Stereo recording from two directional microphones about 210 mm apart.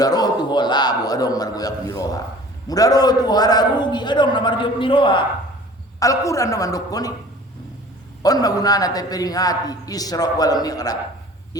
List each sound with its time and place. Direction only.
0.0 s a man's voice: 20° left (ahead or behind)
8.2 s a man's voice: 15° left (ahead or behind)